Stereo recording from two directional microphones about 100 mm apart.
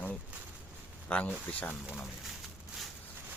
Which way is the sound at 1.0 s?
15° left (ahead or behind).